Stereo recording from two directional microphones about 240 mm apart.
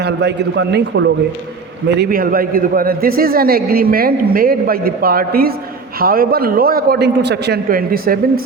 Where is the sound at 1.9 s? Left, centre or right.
Right.